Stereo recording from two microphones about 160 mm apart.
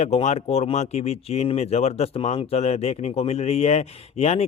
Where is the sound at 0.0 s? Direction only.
45° left (ahead or behind).